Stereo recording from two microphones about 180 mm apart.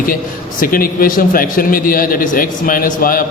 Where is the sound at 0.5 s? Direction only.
50° left (ahead or behind).